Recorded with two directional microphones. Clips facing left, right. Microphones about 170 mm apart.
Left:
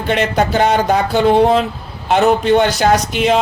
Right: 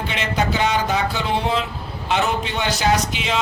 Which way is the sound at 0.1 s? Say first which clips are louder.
Left 9 dB; 50° left (ahead or behind).